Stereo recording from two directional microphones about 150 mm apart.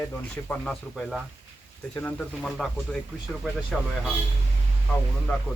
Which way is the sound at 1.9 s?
10° left (ahead or behind).